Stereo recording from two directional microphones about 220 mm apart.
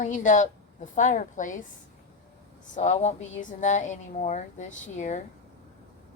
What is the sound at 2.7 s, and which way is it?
A woman's voice, 30° left (ahead or behind).